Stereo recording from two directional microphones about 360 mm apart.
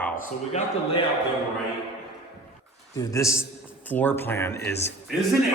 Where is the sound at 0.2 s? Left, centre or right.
Centre.